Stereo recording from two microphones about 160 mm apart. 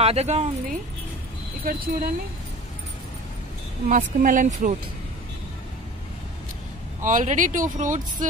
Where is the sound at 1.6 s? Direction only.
65° right (ahead or behind).